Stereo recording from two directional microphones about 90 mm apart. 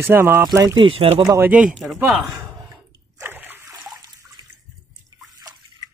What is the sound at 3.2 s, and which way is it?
Splash, 20° right (ahead or behind).